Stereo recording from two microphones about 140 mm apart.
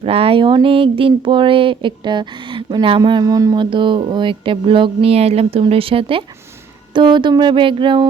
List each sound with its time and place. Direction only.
0.0 s speech: 40° right (ahead or behind)